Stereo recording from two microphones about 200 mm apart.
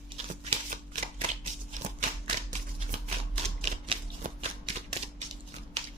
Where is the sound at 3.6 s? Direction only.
35° right (ahead or behind).